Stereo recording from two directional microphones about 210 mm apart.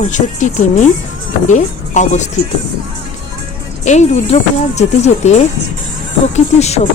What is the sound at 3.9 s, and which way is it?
Speech, 35° left (ahead or behind).